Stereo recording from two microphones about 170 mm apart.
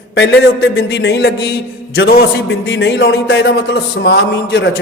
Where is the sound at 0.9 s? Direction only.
90° left.